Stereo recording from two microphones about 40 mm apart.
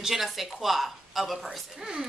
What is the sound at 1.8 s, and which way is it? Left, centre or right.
Speech, centre.